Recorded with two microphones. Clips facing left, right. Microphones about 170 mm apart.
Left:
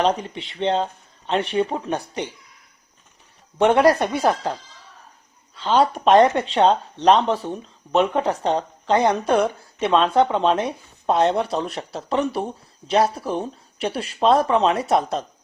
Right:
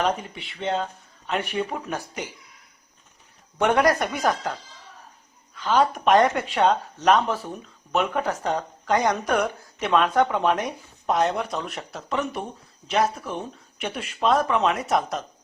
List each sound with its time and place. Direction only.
0.2 s speech: 35° left (ahead or behind)
3.6 s speech: 25° left (ahead or behind)
5.7 s speech: 30° left (ahead or behind)